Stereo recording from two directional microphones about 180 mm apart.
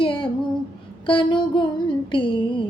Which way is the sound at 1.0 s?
30° left (ahead or behind).